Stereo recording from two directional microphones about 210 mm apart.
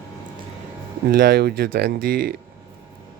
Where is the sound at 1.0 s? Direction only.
45° right (ahead or behind).